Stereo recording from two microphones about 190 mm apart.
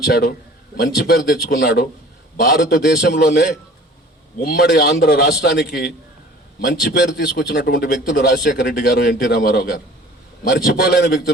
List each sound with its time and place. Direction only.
0.0 s a man's voice: 55° left (ahead or behind)